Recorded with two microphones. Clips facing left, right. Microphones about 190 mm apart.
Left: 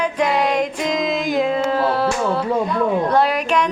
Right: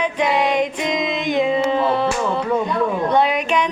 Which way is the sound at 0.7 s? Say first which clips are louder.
Left 1 dB; centre (ahead or behind).